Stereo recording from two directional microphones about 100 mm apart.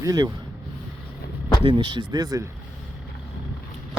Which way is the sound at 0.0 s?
35° right (ahead or behind).